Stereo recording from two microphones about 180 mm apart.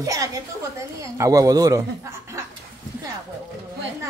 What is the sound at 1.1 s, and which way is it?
Speech, 20° right (ahead or behind).